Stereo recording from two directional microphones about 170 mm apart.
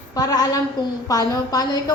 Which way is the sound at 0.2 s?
20° left (ahead or behind).